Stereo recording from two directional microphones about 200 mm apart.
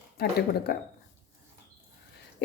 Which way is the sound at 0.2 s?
50° left (ahead or behind).